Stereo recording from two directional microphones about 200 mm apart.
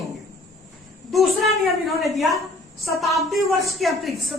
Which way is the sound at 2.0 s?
Centre (ahead or behind).